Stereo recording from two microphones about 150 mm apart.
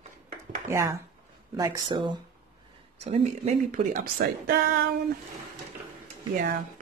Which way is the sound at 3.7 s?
75° right (ahead or behind).